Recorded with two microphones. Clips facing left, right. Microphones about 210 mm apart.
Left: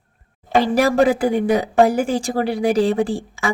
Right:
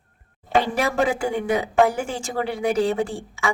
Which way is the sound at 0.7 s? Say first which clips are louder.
Left 6 dB; 35° left (ahead or behind).